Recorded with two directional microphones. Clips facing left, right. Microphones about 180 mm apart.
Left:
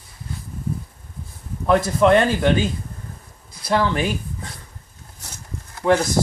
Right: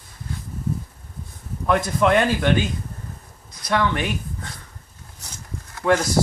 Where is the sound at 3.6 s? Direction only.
35° left (ahead or behind).